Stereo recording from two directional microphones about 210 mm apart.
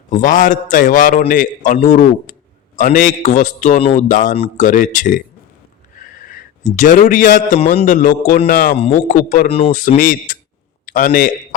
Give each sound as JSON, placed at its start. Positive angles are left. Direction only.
{"t": 0.1, "sound": "a man's voice", "side_deg": 35}
{"t": 6.2, "sound": "a man's voice", "side_deg": 40}
{"t": 8.7, "sound": "a man's voice", "side_deg": 30}